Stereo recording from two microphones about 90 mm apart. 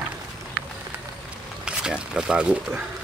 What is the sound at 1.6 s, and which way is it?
Speech, 10° right (ahead or behind).